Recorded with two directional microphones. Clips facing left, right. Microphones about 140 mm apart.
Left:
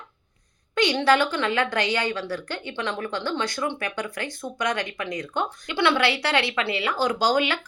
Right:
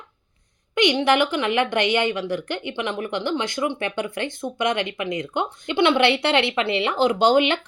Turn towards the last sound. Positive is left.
turn(degrees=-25)  # may be behind; listen again after turning